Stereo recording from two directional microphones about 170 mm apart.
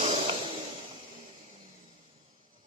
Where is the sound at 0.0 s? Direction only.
35° right (ahead or behind).